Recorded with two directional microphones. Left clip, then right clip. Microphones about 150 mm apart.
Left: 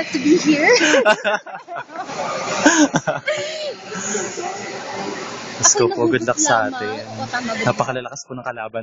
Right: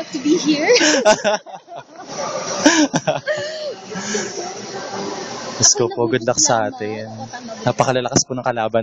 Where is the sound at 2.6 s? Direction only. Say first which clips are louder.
Even; 20° right (ahead or behind).